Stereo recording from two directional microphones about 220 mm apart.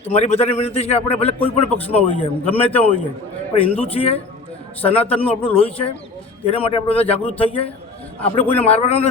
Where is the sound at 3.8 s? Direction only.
25° left (ahead or behind).